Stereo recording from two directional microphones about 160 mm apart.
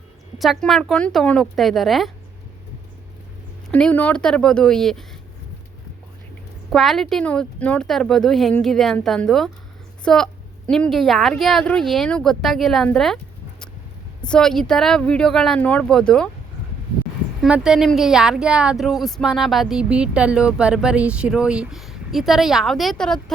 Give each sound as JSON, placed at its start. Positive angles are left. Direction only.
{"t": 0.3, "sound": "speech", "side_deg": 0}
{"t": 3.7, "sound": "speech", "side_deg": 10}
{"t": 6.7, "sound": "a woman's voice", "side_deg": 0}
{"t": 14.3, "sound": "speech", "side_deg": 5}
{"t": 17.4, "sound": "speech", "side_deg": -5}